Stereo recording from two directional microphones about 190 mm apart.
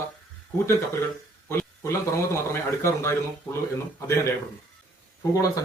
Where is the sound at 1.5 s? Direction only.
15° left (ahead or behind).